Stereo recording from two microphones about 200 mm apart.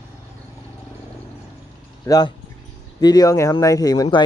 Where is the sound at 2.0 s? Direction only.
20° left (ahead or behind).